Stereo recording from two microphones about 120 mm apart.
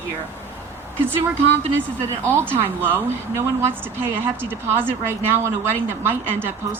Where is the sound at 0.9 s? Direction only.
20° right (ahead or behind).